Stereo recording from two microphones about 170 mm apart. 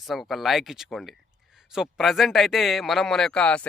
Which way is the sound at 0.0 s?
Centre (ahead or behind).